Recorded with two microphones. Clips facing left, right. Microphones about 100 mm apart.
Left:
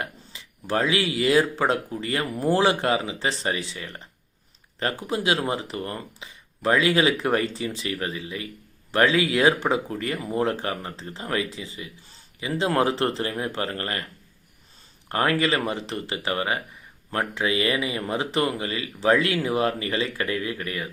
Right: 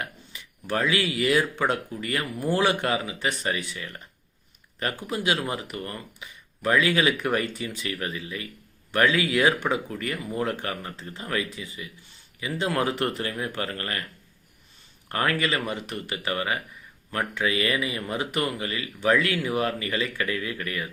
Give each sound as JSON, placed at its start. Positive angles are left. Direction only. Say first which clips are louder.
{"t": 0.0, "sound": "speech", "louder": "left 2 dB", "side_deg": 30}
{"t": 15.1, "sound": "speech", "louder": "left 3 dB", "side_deg": 30}